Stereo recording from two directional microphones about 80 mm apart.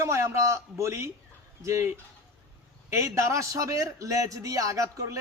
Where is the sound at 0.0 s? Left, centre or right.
Right.